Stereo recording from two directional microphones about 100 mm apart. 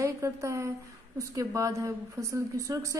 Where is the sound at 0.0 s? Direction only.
30° right (ahead or behind).